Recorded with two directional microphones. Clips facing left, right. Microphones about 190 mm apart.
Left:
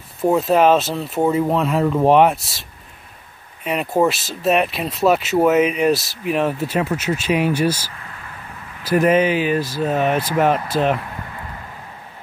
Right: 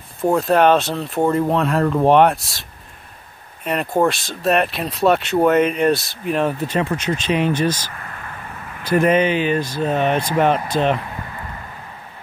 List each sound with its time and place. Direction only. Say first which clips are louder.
0.2 s speech: even; 5° left (ahead or behind)
3.6 s speech: even; centre (ahead or behind)
7.9 s a sound: right 3 dB; 55° right (ahead or behind)
8.8 s speech: even; 5° left (ahead or behind)